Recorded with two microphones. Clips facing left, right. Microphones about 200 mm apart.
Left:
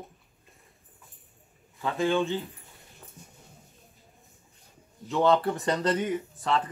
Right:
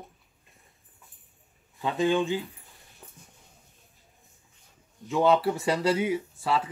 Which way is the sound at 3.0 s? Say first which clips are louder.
Right 1 dB; 15° right (ahead or behind).